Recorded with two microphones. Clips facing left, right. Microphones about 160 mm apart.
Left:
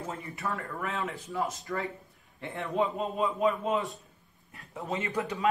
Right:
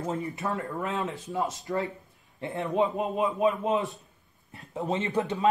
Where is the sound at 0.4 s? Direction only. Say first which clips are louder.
Right 4 dB; 20° right (ahead or behind).